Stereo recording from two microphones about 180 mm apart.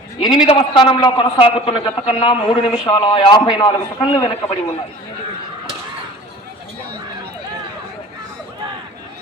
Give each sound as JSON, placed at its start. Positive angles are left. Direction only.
{"t": 0.2, "sound": "a man's voice", "side_deg": 25}